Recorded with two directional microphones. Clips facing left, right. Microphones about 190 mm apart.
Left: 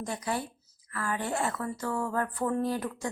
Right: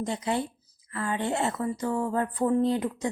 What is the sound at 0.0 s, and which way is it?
Speech, 20° right (ahead or behind).